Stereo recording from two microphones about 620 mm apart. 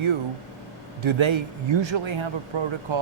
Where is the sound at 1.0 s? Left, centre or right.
Right.